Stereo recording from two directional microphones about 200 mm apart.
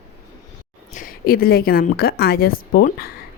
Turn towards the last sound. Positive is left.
turn(degrees=45)  # may be behind; listen again after turning